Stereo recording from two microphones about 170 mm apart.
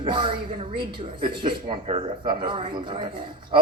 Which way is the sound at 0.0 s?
30° right (ahead or behind).